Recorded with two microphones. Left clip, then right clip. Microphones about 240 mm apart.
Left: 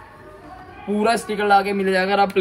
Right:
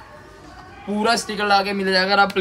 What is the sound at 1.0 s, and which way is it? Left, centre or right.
Speech, centre.